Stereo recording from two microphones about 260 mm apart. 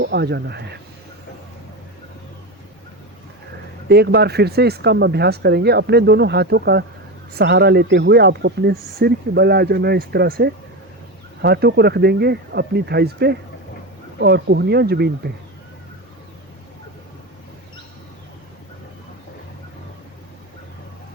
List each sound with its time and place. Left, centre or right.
0.0 s speech: right
3.8 s speech: right